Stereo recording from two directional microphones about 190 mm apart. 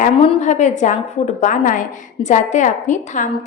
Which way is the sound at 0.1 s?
30° left (ahead or behind).